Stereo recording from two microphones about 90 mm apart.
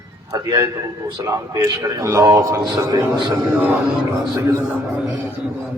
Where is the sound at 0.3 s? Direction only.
40° right (ahead or behind).